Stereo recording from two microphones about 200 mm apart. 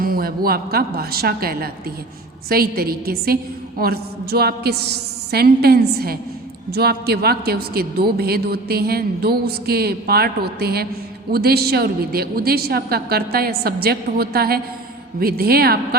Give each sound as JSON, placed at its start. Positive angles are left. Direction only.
{"t": 0.0, "sound": "a woman's voice", "side_deg": -45}